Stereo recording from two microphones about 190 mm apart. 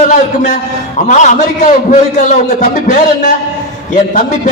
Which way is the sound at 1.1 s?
40° left (ahead or behind).